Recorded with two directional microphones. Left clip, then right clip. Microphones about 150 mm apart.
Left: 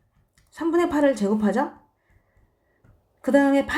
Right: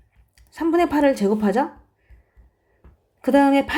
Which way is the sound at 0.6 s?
35° right (ahead or behind).